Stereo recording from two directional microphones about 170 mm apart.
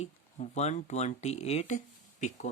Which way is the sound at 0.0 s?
40° left (ahead or behind).